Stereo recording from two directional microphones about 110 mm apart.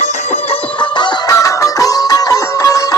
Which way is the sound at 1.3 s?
30° left (ahead or behind).